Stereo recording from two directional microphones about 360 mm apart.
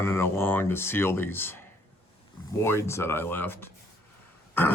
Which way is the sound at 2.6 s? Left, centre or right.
Centre.